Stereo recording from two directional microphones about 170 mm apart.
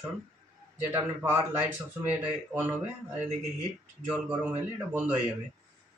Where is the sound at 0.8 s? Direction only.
15° right (ahead or behind).